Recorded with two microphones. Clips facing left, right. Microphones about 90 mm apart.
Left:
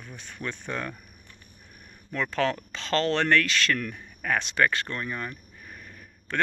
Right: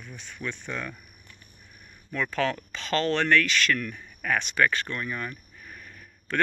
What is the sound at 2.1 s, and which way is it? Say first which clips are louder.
Speech: left 1 dB; 35° left (ahead or behind).